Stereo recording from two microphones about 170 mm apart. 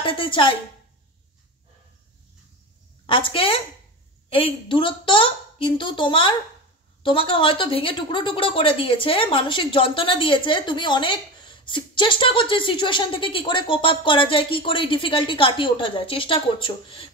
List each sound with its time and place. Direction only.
0.0 s a woman's voice: 30° left (ahead or behind)
3.1 s a woman's voice: 30° left (ahead or behind)